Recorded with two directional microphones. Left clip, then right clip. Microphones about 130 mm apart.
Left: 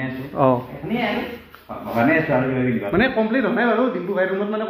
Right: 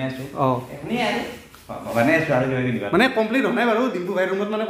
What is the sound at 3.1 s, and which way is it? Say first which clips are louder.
Speech: even; 20° right (ahead or behind).